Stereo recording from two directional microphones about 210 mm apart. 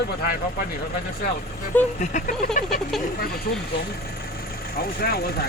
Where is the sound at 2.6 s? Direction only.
40° left (ahead or behind).